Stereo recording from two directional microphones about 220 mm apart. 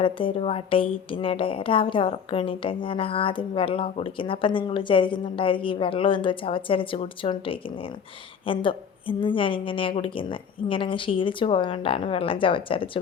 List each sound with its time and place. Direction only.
0.0 s a woman's voice: 25° left (ahead or behind)